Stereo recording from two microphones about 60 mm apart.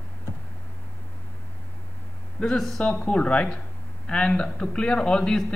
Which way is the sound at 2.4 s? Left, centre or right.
Centre.